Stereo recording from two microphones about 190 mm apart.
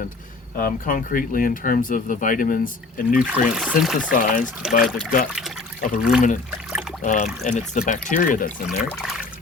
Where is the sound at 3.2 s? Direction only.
5° right (ahead or behind).